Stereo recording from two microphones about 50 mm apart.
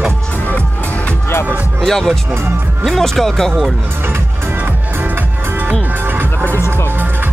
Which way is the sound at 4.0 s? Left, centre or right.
Right.